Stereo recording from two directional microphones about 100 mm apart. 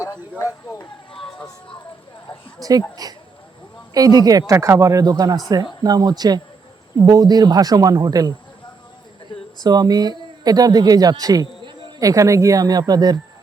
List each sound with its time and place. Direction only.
0.0 s a sound: 35° left (ahead or behind)
2.6 s speech: 40° right (ahead or behind)
9.6 s speech: 40° right (ahead or behind)